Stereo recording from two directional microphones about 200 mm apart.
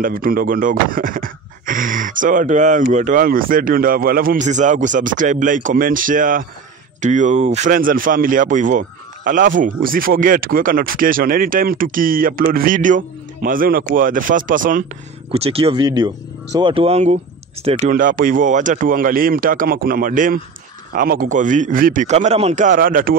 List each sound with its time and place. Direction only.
0.0 s speech: 45° right (ahead or behind)
15.3 s a man's voice: 30° right (ahead or behind); by 23.1 s 45° right (ahead or behind)